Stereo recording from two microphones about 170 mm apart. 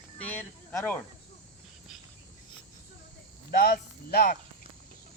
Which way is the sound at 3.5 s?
60° left (ahead or behind).